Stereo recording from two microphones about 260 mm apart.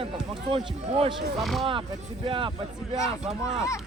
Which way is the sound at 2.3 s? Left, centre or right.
Centre.